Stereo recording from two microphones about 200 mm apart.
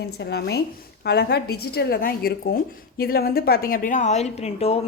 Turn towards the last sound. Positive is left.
turn(degrees=30)  # may be behind; listen again after turning